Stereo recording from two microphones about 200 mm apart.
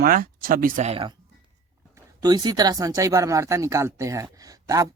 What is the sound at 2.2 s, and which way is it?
Speech, 20° right (ahead or behind).